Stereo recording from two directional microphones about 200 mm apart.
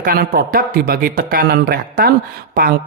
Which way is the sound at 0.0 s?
45° right (ahead or behind).